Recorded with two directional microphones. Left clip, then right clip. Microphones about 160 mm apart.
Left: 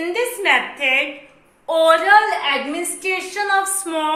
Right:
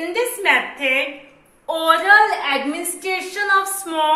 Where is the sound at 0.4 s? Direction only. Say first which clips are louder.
Left 1 dB; 30° left (ahead or behind).